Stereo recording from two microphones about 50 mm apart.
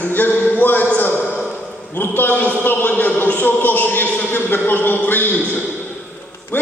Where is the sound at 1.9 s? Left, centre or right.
Left.